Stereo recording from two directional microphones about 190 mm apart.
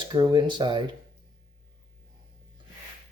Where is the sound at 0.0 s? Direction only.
20° right (ahead or behind).